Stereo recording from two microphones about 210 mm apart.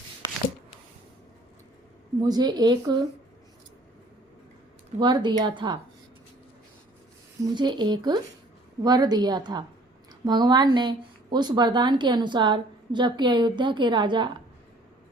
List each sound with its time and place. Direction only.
0.2 s a sound: 20° right (ahead or behind)
2.2 s a woman's voice: 20° right (ahead or behind)
4.9 s a woman's voice: 20° right (ahead or behind)
7.5 s a woman's voice: 20° right (ahead or behind)